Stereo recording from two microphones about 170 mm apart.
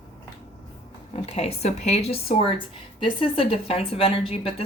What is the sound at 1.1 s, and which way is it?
Speech, 35° left (ahead or behind).